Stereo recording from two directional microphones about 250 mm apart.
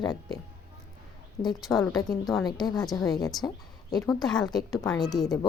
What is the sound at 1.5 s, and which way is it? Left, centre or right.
Speech, centre.